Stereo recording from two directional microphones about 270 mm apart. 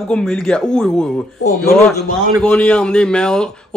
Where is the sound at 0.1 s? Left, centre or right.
Centre.